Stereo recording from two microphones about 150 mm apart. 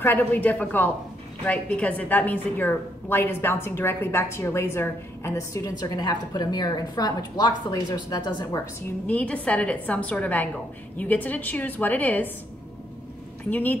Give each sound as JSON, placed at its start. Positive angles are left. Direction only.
{"t": 0.0, "sound": "a woman's voice", "side_deg": 10}
{"t": 9.0, "sound": "a woman's voice", "side_deg": 10}
{"t": 13.5, "sound": "a woman's voice", "side_deg": 10}